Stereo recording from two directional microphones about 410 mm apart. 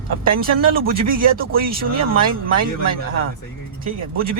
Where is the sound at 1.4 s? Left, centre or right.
Right.